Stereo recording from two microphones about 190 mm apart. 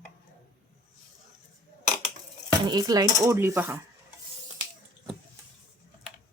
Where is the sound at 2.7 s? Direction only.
20° right (ahead or behind).